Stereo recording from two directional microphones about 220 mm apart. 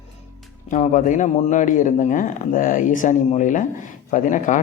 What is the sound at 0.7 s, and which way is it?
Speech, 35° left (ahead or behind).